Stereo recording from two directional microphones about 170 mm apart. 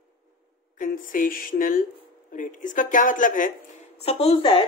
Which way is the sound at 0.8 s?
50° left (ahead or behind).